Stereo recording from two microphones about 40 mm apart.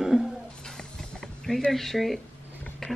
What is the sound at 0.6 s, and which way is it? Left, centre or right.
Music, centre.